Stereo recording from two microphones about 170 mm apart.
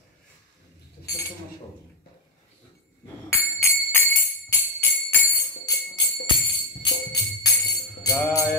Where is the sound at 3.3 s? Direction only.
15° left (ahead or behind).